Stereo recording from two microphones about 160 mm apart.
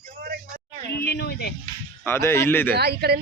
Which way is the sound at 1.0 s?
85° left.